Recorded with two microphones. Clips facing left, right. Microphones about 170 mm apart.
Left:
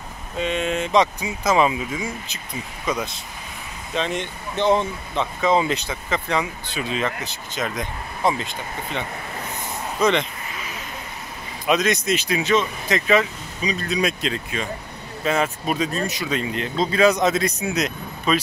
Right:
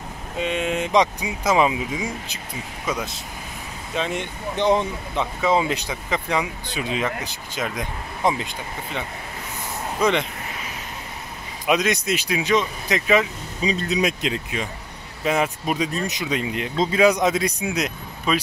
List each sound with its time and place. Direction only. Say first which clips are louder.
0.4 s speech: even; 10° right (ahead or behind)
2.9 s speech: left 2 dB; centre (ahead or behind)
11.6 s speech: left 1 dB; 10° right (ahead or behind)
13.6 s speech: right 1 dB; 25° right (ahead or behind); by 18.4 s 10° right (ahead or behind)